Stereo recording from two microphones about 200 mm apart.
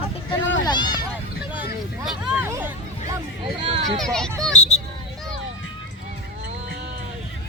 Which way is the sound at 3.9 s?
5° left (ahead or behind).